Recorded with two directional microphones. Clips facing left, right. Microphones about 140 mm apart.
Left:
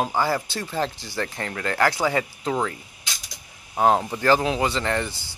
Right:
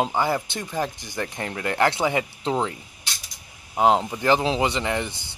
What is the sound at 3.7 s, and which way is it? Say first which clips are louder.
Speech: even; 20° right (ahead or behind).